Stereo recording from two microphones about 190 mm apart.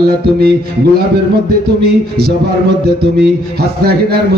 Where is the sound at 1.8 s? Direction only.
55° right (ahead or behind).